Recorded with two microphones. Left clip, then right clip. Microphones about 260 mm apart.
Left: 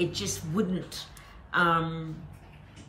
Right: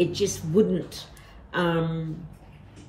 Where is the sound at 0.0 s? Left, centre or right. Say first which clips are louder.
Right 6 dB; centre.